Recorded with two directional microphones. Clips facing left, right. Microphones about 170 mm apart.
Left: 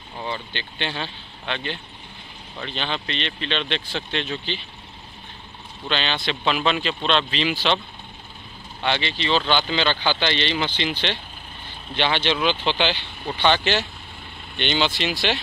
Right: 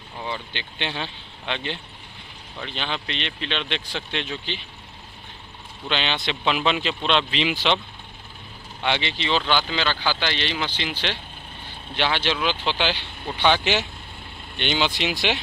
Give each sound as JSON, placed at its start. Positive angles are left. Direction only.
{"t": 0.5, "sound": "speech", "side_deg": -15}
{"t": 5.9, "sound": "speech", "side_deg": -15}
{"t": 8.8, "sound": "speech", "side_deg": -15}